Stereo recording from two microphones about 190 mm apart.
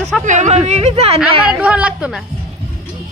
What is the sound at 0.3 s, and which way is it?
Speech, 40° right (ahead or behind).